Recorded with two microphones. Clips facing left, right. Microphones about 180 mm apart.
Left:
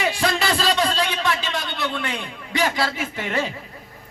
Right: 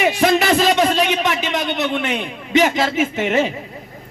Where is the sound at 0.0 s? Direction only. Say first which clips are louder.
Right 7 dB; 20° right (ahead or behind).